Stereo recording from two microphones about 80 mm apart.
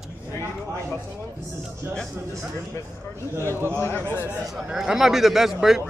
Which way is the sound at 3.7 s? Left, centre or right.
Left.